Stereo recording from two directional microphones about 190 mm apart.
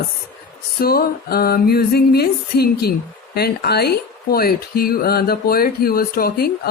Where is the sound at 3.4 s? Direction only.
55° left (ahead or behind).